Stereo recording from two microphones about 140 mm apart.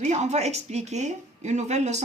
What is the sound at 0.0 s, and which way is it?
Speech, 55° right (ahead or behind).